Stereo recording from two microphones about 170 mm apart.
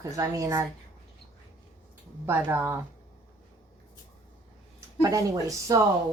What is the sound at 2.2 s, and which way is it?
Speech, 15° right (ahead or behind).